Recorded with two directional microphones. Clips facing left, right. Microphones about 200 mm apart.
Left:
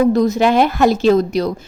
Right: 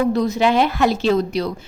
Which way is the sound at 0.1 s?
45° left (ahead or behind).